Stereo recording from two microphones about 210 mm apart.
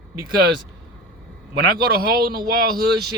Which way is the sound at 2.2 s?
45° right (ahead or behind).